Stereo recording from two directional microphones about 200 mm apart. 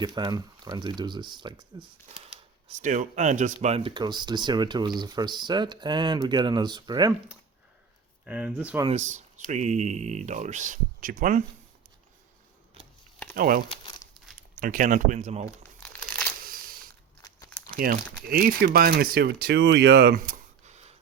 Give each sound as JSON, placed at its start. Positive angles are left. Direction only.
{"t": 0.0, "sound": "speech", "side_deg": -20}
{"t": 2.3, "sound": "speech", "side_deg": -35}
{"t": 8.3, "sound": "speech", "side_deg": -5}
{"t": 8.9, "sound": "speech", "side_deg": -35}
{"t": 13.3, "sound": "speech", "side_deg": -45}
{"t": 13.8, "sound": "crumpling", "side_deg": 20}
{"t": 14.6, "sound": "speech", "side_deg": -45}
{"t": 15.8, "sound": "crumpling", "side_deg": 5}
{"t": 17.2, "sound": "crumpling", "side_deg": 20}
{"t": 17.8, "sound": "speech", "side_deg": -45}